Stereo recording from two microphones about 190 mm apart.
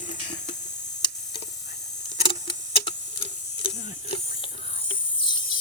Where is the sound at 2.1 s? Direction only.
30° left (ahead or behind).